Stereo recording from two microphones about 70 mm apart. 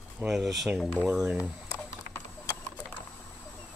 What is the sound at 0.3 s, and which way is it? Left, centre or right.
Speech, centre.